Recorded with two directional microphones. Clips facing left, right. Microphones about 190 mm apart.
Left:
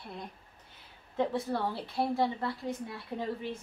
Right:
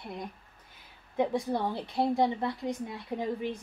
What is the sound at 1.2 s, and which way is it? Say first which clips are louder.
A woman's voice: right 2 dB; 15° right (ahead or behind).